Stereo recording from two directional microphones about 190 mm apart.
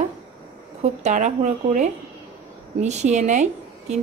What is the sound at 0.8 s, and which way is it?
Speech, 40° right (ahead or behind).